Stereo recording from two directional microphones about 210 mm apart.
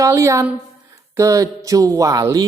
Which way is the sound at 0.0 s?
15° right (ahead or behind).